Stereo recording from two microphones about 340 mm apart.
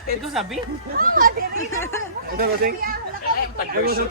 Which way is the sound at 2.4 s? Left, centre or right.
Right.